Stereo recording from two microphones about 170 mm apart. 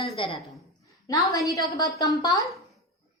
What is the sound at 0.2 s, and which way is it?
A woman's voice, 30° left (ahead or behind).